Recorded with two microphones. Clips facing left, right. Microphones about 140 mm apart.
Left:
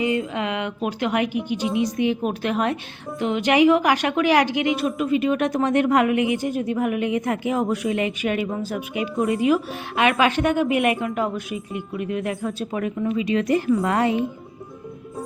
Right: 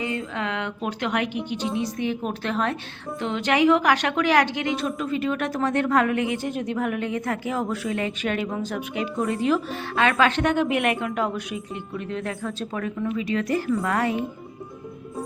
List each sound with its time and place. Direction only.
0.0 s a woman's voice: 15° left (ahead or behind)